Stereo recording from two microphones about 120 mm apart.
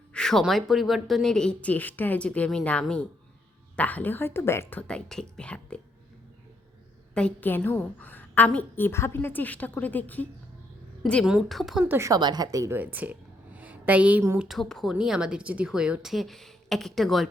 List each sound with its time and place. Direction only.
0.1 s a woman's voice: 5° left (ahead or behind)
7.1 s a woman's voice: 10° left (ahead or behind)
11.9 s speech: 25° right (ahead or behind)
12.8 s a sound: 15° right (ahead or behind)
14.3 s a woman's voice: centre (ahead or behind)